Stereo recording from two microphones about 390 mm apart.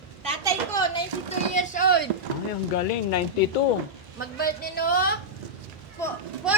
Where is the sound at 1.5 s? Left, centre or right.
Centre.